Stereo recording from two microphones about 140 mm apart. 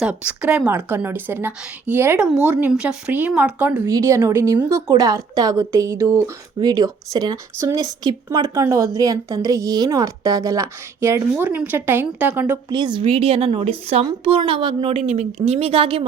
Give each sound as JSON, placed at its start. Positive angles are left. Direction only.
{"t": 0.0, "sound": "a woman's voice", "side_deg": -10}
{"t": 3.8, "sound": "a woman's voice", "side_deg": -25}
{"t": 12.6, "sound": "a woman's voice", "side_deg": -30}